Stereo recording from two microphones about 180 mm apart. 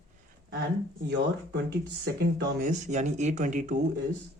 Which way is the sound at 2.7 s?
40° right (ahead or behind).